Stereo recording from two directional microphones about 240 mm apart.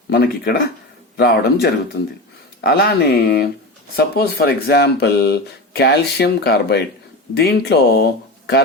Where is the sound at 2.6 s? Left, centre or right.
Left.